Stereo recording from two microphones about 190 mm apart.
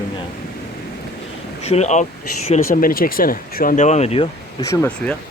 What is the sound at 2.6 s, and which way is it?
Speech, 50° left (ahead or behind).